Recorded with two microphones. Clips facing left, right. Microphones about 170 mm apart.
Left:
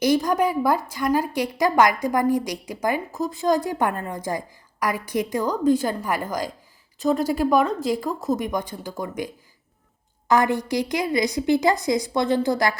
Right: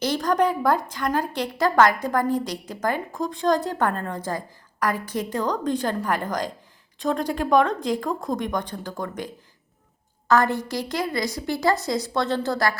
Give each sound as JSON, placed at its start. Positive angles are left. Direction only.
{"t": 0.0, "sound": "a woman's voice", "side_deg": 10}